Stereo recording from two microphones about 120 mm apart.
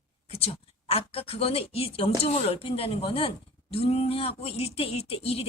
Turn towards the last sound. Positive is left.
turn(degrees=55)  # may be behind; listen again after turning